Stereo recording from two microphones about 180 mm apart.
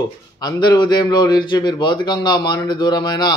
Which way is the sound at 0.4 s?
25° left (ahead or behind).